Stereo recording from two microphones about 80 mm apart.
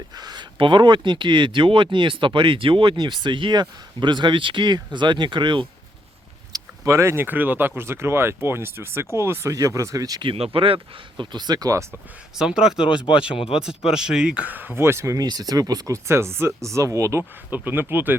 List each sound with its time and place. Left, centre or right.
0.2 s speech: right
6.5 s a sound: right
7.3 s speech: right
9.5 s speech: right
11.2 s speech: right
11.7 s speech: right
12.4 s speech: centre
14.4 s speech: right
15.2 s speech: right
16.0 s speech: right
17.5 s speech: right